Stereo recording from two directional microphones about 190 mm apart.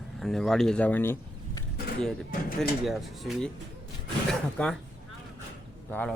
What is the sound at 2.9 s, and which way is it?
Speech, centre (ahead or behind).